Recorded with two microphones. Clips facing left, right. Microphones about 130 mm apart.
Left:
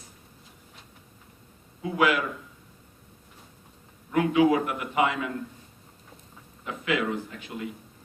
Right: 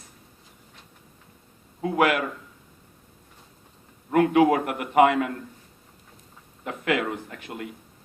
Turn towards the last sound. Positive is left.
turn(degrees=-60)  # may be behind; listen again after turning